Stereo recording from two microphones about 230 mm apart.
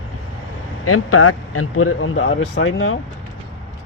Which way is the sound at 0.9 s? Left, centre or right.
Left.